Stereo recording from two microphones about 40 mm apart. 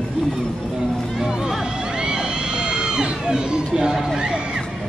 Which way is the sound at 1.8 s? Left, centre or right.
Centre.